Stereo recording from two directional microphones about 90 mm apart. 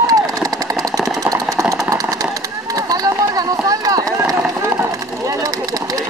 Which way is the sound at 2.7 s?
40° right (ahead or behind).